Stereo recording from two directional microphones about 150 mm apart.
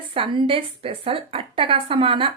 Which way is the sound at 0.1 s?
35° right (ahead or behind).